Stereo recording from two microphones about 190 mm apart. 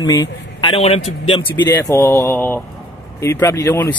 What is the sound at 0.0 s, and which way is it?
Speech, 20° left (ahead or behind).